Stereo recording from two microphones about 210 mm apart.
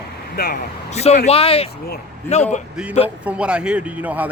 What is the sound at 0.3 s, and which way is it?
Speech, 45° left (ahead or behind).